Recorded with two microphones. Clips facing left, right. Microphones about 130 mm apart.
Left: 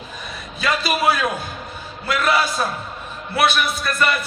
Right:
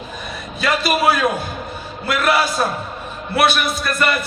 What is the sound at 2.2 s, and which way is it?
Speech, 5° right (ahead or behind).